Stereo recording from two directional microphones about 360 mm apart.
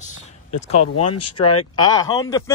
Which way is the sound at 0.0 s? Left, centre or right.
Centre.